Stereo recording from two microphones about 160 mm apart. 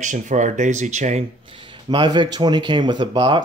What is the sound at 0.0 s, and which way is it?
Speech, 50° right (ahead or behind).